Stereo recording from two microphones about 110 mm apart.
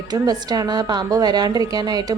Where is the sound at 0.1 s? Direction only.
35° right (ahead or behind).